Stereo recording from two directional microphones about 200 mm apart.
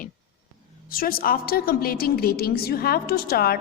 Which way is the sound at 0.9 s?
45° left (ahead or behind).